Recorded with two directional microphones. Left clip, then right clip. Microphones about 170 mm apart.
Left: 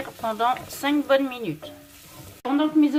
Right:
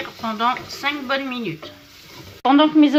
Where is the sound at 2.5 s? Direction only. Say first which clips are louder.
Right 7 dB; 40° right (ahead or behind).